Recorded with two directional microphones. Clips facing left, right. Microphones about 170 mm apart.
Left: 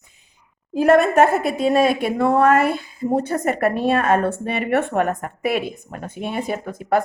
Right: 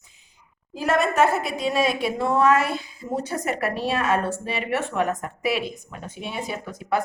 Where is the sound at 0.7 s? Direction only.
55° left (ahead or behind).